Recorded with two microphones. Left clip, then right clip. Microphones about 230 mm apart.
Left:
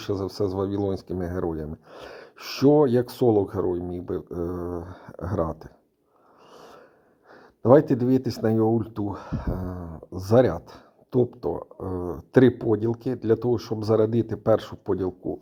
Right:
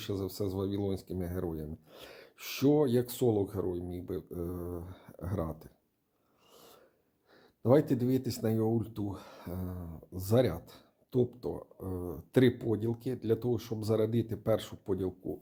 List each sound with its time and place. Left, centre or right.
0.0 s speech: left
6.5 s a sound: left
7.6 s speech: left